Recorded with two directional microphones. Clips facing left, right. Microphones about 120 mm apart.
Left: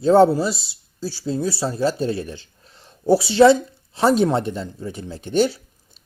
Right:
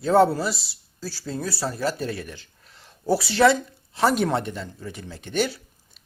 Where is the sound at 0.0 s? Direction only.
25° left (ahead or behind).